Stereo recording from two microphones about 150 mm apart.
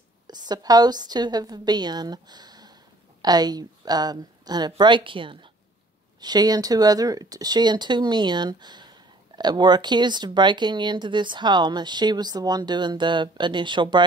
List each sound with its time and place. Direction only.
0.3 s speech: 30° right (ahead or behind)